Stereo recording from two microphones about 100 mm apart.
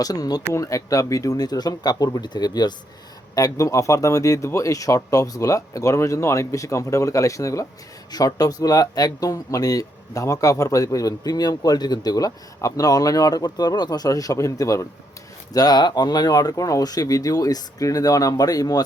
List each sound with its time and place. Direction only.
0.0 s speech: 40° left (ahead or behind)